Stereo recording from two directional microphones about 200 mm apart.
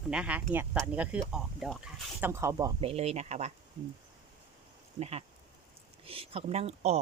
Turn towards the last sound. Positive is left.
turn(degrees=-30)  # may be behind; listen again after turning